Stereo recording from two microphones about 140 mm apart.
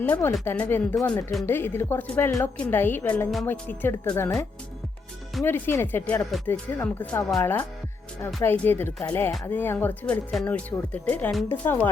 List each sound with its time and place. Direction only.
0.0 s speech: 15° left (ahead or behind)
1.5 s speech: 15° left (ahead or behind)
8.4 s speech: 15° left (ahead or behind)